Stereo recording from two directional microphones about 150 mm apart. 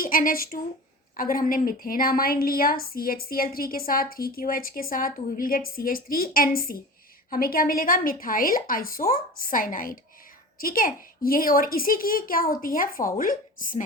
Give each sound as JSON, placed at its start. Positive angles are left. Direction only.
{"t": 0.0, "sound": "a woman's voice", "side_deg": 70}